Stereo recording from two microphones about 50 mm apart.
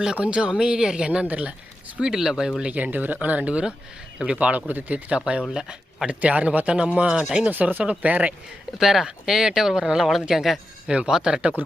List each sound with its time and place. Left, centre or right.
0.2 s speech: right
2.0 s speech: centre
2.7 s speech: right
5.0 s speech: right
5.5 s speech: centre
6.1 s speech: right
7.5 s speech: right
8.8 s speech: centre
11.1 s speech: centre